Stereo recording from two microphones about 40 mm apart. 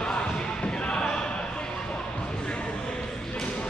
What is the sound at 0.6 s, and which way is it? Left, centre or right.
Thump, left.